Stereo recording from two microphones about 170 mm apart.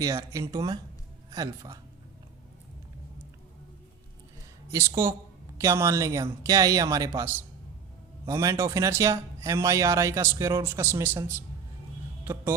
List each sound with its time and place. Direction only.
0.0 s speech: 20° right (ahead or behind)
4.7 s speech: 15° right (ahead or behind)
12.2 s a sound: 15° right (ahead or behind)